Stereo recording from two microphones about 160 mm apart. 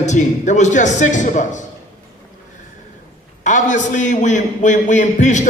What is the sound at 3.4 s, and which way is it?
A man's voice, 50° left (ahead or behind).